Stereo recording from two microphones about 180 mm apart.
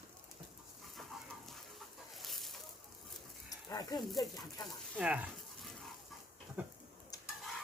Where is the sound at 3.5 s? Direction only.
20° left (ahead or behind).